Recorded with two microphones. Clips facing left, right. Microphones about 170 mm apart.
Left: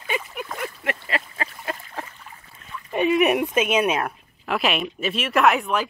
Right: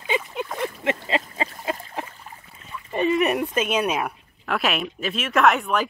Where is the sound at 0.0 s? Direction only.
25° right (ahead or behind).